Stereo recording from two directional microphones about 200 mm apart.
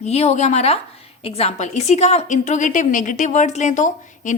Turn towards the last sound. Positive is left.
turn(degrees=40)  # may be behind; listen again after turning